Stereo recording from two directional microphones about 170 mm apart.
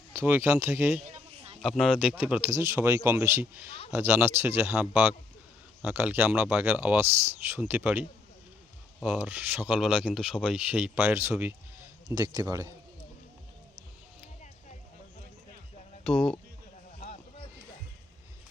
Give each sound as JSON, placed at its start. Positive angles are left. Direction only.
{"t": 0.1, "sound": "speech", "side_deg": -15}
{"t": 1.0, "sound": "a sound", "side_deg": -40}
{"t": 1.6, "sound": "speech", "side_deg": 0}
{"t": 9.1, "sound": "speech", "side_deg": -10}
{"t": 12.0, "sound": "speech", "side_deg": -25}
{"t": 16.0, "sound": "speech", "side_deg": 5}